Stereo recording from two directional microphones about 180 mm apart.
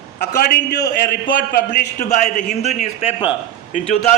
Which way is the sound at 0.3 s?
60° left (ahead or behind).